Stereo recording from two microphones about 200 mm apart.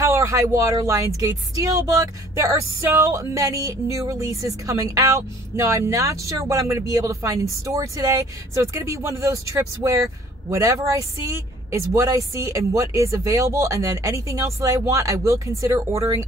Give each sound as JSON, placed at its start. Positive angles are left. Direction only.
{"t": 0.0, "sound": "speech", "side_deg": -15}
{"t": 10.5, "sound": "speech", "side_deg": -15}